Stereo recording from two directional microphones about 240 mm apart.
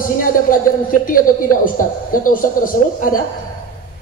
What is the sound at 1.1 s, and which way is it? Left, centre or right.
A man's voice, left.